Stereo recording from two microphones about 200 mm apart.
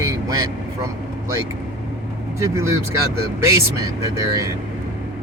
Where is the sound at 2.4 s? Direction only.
15° right (ahead or behind).